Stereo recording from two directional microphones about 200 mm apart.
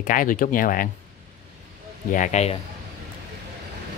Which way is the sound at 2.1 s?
35° left (ahead or behind).